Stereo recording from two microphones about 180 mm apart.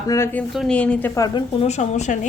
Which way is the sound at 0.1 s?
10° left (ahead or behind).